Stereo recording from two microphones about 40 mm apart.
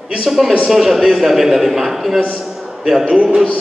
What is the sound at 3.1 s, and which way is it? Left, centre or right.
Speech, right.